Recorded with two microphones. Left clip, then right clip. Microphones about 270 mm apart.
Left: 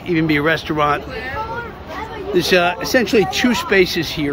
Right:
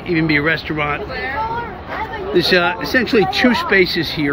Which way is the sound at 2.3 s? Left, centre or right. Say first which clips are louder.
Even; centre.